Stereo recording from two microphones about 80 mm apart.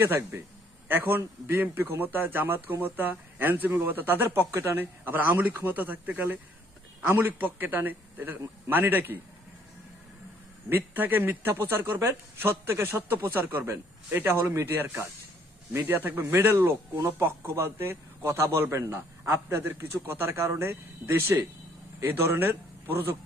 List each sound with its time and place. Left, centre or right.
0.0 s speech: right
10.7 s a man's voice: right